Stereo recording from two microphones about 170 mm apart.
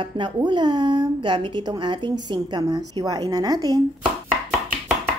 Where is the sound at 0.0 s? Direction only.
30° right (ahead or behind).